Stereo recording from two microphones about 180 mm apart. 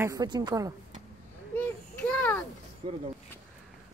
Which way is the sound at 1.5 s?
10° left (ahead or behind).